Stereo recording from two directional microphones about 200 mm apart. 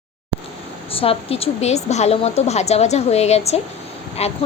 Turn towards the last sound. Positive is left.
turn(degrees=30)  # may be behind; listen again after turning